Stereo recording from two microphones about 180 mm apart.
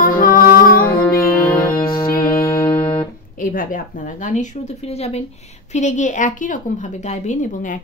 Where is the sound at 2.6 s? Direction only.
30° left (ahead or behind).